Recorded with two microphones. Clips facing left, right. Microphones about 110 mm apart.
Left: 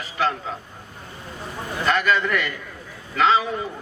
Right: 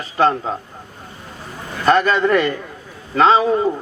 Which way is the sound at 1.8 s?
35° right (ahead or behind).